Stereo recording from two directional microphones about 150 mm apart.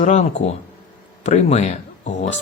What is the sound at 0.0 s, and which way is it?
Speech, 50° left (ahead or behind).